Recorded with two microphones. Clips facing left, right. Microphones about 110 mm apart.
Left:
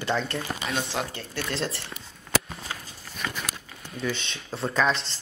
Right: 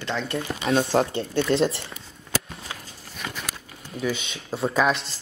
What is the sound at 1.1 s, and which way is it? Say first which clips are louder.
Speech: right 10 dB; 25° right (ahead or behind).